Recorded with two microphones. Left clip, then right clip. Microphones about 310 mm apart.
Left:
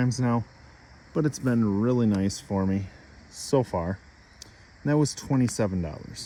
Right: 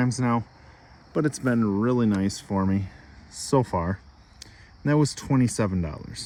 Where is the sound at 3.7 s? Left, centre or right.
Right.